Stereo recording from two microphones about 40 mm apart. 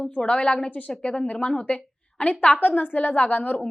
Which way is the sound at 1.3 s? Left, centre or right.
Left.